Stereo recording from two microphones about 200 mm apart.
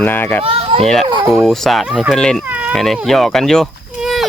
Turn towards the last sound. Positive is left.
turn(degrees=0)  # may be behind; listen again after turning